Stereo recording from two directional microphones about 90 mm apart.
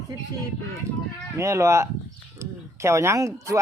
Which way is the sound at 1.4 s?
35° right (ahead or behind).